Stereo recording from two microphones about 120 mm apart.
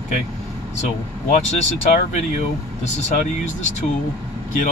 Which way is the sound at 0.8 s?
70° left (ahead or behind).